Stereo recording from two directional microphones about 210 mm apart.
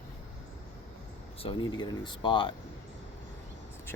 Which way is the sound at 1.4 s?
20° left (ahead or behind).